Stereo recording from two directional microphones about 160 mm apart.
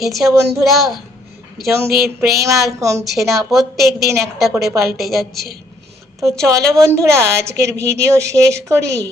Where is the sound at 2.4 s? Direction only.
20° right (ahead or behind).